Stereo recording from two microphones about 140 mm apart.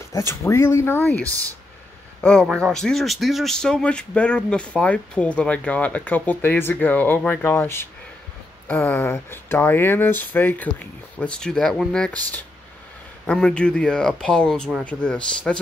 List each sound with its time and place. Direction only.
0.1 s speech: 20° left (ahead or behind)
2.5 s speech: 5° left (ahead or behind)